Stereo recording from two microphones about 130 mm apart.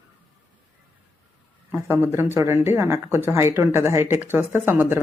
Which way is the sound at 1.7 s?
15° right (ahead or behind).